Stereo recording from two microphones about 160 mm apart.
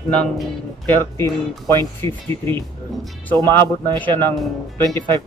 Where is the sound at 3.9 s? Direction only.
10° left (ahead or behind).